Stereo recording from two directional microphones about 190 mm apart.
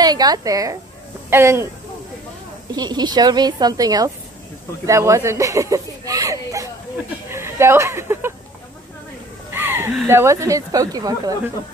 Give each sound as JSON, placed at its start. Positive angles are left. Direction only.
{"t": 0.0, "sound": "a woman's voice", "side_deg": -20}
{"t": 2.7, "sound": "a woman's voice", "side_deg": -20}
{"t": 4.8, "sound": "a sound", "side_deg": -15}
{"t": 7.2, "sound": "speech", "side_deg": -15}
{"t": 9.5, "sound": "a sound", "side_deg": -10}
{"t": 10.0, "sound": "speech", "side_deg": -15}